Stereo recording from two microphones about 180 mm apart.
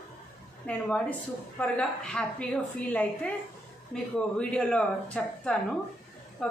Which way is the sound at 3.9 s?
5° left (ahead or behind).